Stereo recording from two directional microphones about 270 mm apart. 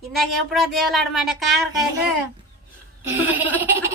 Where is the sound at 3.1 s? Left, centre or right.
Centre.